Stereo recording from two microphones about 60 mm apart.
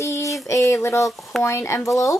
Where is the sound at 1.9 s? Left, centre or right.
Left.